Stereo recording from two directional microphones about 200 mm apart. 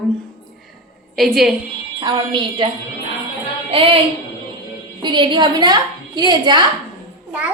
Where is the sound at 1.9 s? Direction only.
20° right (ahead or behind).